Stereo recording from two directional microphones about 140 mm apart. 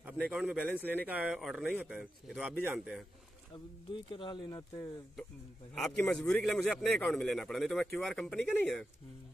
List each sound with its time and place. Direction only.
0.0 s a man's voice: 10° right (ahead or behind)
4.1 s speech: 35° left (ahead or behind)
5.8 s a man's voice: 5° left (ahead or behind)